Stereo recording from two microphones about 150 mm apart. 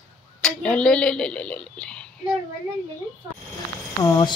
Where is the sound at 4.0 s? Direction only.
20° left (ahead or behind).